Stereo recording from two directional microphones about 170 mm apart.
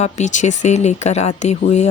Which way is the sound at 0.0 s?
45° left (ahead or behind).